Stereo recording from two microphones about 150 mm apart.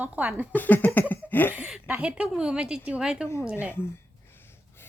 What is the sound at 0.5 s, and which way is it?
Cough, 10° left (ahead or behind).